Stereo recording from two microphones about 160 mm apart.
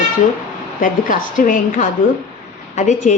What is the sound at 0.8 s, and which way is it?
A woman's voice, 55° left (ahead or behind).